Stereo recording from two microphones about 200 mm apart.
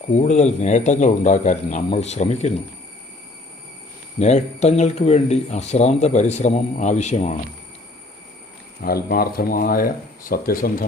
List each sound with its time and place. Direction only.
0.1 s speech: 35° left (ahead or behind)
4.2 s speech: 35° left (ahead or behind)
8.8 s speech: 50° left (ahead or behind)